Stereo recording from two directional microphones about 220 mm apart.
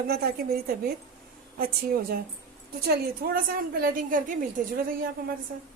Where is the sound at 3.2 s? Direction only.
45° right (ahead or behind).